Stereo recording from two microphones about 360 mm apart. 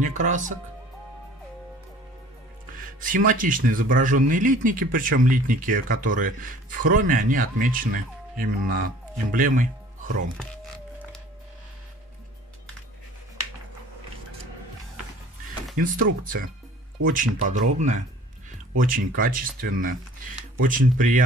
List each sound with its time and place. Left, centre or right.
0.0 s speech: right
3.0 s speech: right
10.3 s music: centre
15.8 s speech: right